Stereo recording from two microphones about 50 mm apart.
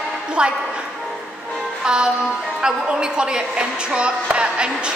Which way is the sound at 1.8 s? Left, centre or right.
Centre.